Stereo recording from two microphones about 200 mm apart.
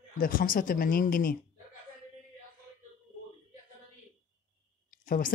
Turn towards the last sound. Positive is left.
turn(degrees=45)  # may be behind; listen again after turning